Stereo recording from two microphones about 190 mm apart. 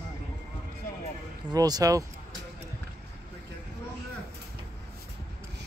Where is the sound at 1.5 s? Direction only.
20° right (ahead or behind).